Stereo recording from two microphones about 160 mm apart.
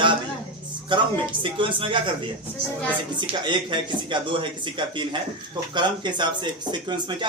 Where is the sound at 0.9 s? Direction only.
30° right (ahead or behind).